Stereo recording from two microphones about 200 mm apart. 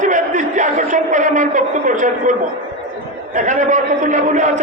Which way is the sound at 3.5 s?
40° right (ahead or behind).